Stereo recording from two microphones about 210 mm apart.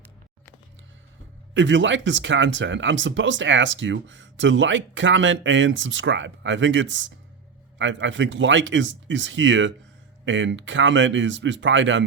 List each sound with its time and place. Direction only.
1.5 s speech: 60° right (ahead or behind)